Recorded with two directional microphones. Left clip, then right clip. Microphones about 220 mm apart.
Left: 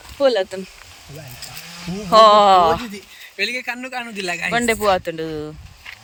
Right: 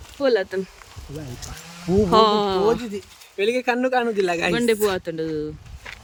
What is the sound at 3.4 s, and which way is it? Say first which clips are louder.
Speech: right 3 dB; 40° right (ahead or behind).